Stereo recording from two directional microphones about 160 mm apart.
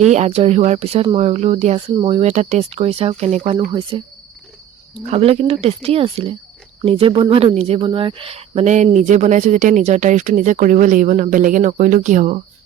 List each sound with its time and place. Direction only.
0.0 s speech: 45° right (ahead or behind)
3.7 s speech: 30° right (ahead or behind)
5.1 s speech: 40° right (ahead or behind)